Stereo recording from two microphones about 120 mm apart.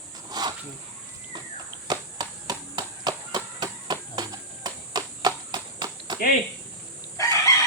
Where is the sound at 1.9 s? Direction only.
35° right (ahead or behind).